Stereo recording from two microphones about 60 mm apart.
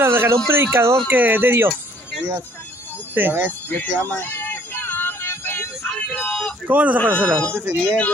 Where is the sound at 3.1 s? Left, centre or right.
Right.